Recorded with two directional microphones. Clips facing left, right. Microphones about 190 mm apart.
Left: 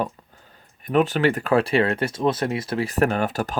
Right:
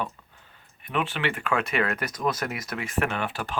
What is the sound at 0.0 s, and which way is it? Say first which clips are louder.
Speech: left 6 dB; 40° left (ahead or behind).